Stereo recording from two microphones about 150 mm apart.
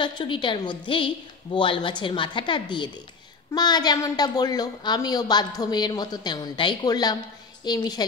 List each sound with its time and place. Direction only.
0.0 s a woman's voice: 30° left (ahead or behind)